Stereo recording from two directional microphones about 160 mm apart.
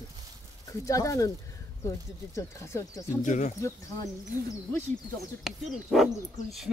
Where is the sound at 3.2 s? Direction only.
50° left (ahead or behind).